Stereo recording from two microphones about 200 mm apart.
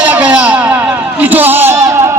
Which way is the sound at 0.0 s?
5° right (ahead or behind).